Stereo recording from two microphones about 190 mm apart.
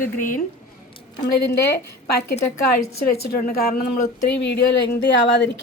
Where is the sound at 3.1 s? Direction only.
50° left (ahead or behind).